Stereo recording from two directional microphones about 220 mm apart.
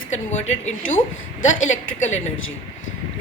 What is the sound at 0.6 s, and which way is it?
Speech, 35° left (ahead or behind).